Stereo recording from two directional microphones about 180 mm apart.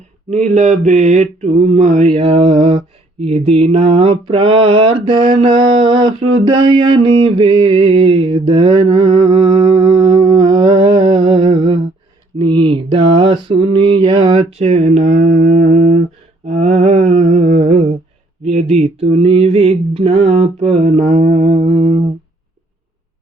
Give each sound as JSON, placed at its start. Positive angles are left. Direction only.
{"t": 0.3, "sound": "mantra", "side_deg": -40}
{"t": 10.0, "sound": "music", "side_deg": -20}
{"t": 12.4, "sound": "mantra", "side_deg": -30}
{"t": 14.6, "sound": "mantra", "side_deg": -40}